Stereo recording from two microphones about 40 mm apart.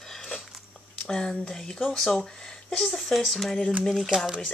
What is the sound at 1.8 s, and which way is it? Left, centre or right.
Speech, centre.